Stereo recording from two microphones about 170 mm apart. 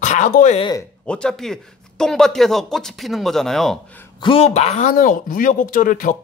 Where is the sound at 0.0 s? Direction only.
45° left (ahead or behind).